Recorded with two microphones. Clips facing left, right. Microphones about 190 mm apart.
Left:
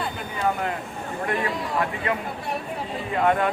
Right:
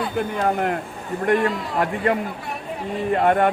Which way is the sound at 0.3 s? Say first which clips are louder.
Right 2 dB; 60° right (ahead or behind).